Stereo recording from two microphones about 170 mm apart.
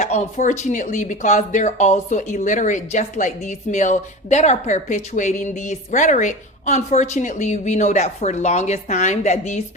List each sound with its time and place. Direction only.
0.0 s speech: 45° left (ahead or behind)